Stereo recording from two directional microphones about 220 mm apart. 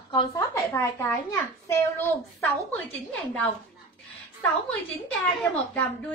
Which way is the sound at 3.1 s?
5° left (ahead or behind).